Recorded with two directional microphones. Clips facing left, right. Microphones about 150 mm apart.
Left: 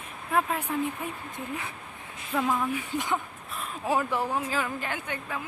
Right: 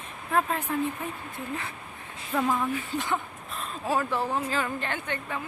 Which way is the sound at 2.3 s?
Centre (ahead or behind).